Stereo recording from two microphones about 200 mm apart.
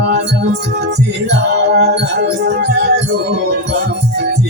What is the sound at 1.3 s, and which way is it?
Music, 55° right (ahead or behind).